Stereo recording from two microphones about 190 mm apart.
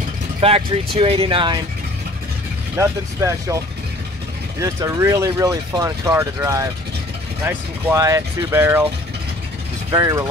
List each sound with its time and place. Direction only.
0.4 s speech: 30° right (ahead or behind)
2.8 s speech: 15° right (ahead or behind)
9.8 s speech: 15° right (ahead or behind)